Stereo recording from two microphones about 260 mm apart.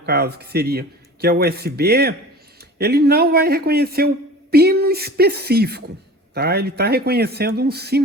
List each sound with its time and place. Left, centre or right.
0.0 s speech: right